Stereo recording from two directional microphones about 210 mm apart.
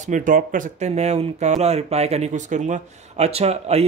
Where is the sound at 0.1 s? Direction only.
40° right (ahead or behind).